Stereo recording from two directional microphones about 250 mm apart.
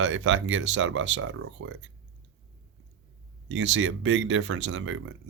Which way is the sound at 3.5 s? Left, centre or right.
Right.